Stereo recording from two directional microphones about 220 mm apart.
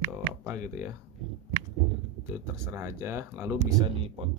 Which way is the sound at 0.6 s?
35° left (ahead or behind).